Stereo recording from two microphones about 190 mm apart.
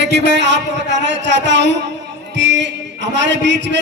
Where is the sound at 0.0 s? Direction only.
65° right (ahead or behind).